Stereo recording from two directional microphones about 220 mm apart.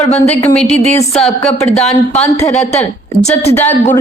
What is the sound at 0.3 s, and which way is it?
A woman's voice, 5° left (ahead or behind).